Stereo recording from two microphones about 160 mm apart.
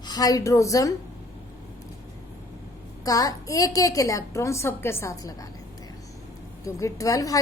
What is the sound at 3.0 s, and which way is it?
A woman's voice, 20° left (ahead or behind).